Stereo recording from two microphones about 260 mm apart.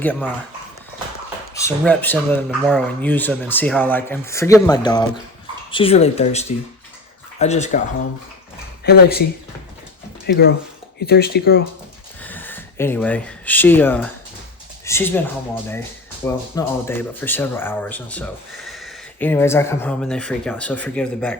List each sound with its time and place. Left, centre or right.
0.0 s speech: centre
1.5 s speech: centre; by 7.8 s left
8.8 s speech: left
10.2 s speech: left
12.2 s speech: centre